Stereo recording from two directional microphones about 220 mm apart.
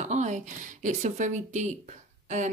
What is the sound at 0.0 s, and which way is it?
Speech, 30° right (ahead or behind).